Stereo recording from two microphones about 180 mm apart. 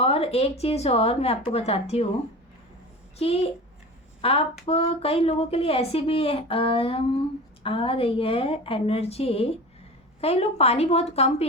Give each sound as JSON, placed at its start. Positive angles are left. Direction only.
{"t": 0.0, "sound": "speech", "side_deg": 35}
{"t": 3.2, "sound": "speech", "side_deg": 35}